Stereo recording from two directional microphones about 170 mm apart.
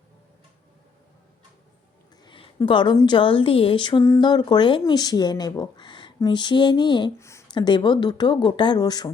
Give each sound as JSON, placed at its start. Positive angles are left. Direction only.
{"t": 2.2, "sound": "a woman's voice", "side_deg": 30}
{"t": 7.2, "sound": "speech", "side_deg": 15}